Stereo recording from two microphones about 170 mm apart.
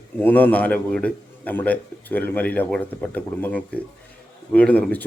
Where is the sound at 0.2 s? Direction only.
10° left (ahead or behind).